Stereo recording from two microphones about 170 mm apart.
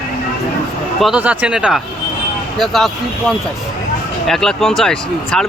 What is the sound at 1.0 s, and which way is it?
Speech, 5° right (ahead or behind).